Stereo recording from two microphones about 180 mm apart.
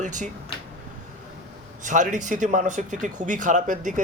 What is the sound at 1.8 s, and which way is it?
Speech, 45° right (ahead or behind).